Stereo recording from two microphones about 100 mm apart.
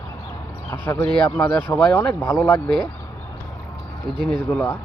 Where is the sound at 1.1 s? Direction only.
5° left (ahead or behind); by 2.5 s 25° left (ahead or behind).